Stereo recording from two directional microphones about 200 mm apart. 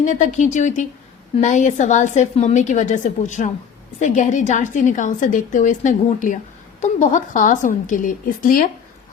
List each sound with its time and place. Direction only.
0.0 s a woman's voice: 40° left (ahead or behind)